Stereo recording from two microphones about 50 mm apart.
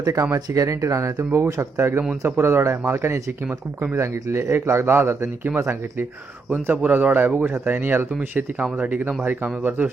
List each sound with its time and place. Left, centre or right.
0.1 s speech: right
2.2 s speech: right
6.5 s speech: right